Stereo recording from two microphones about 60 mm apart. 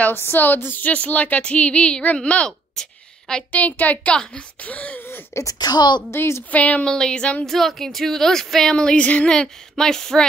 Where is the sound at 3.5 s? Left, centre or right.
Left.